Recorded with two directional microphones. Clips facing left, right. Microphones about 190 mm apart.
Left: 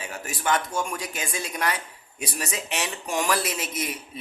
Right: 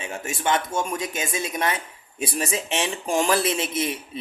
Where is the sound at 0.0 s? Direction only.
25° right (ahead or behind).